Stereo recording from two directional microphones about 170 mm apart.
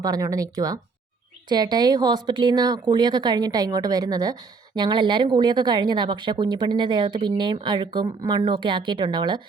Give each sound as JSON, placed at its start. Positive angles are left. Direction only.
{"t": 0.0, "sound": "speech", "side_deg": -20}